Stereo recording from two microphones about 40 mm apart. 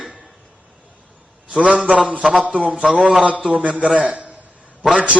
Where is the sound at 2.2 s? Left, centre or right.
Centre.